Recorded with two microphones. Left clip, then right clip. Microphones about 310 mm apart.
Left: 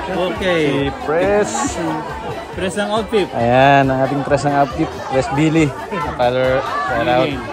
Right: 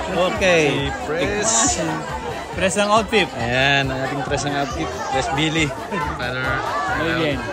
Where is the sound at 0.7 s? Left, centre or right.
Centre.